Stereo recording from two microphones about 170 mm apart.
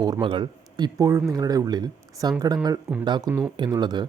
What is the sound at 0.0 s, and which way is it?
Speech, 25° right (ahead or behind).